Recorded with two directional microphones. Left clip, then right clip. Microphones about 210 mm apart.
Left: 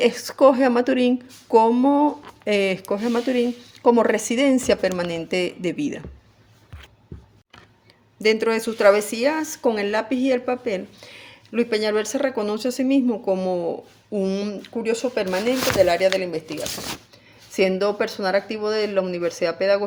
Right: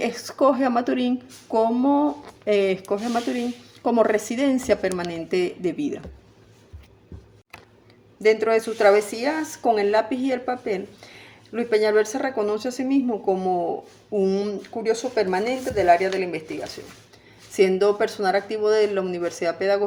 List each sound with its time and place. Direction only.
0.0 s a woman's voice: 40° left (ahead or behind)
8.2 s a woman's voice: 45° left (ahead or behind)
17.5 s a woman's voice: 40° left (ahead or behind)